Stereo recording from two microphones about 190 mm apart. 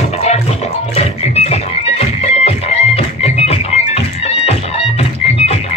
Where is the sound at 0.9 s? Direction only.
35° left (ahead or behind).